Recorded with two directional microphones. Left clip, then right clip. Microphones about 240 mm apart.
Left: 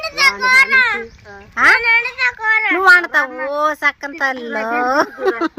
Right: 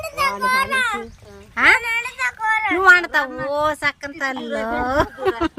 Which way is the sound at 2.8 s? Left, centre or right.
Centre.